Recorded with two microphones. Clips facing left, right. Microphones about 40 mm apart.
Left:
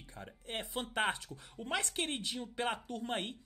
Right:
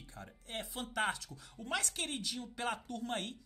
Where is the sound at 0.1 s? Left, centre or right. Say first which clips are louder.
Left 3 dB; left.